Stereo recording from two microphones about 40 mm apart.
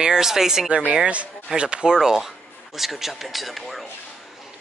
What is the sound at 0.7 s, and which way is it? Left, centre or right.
Speech, right.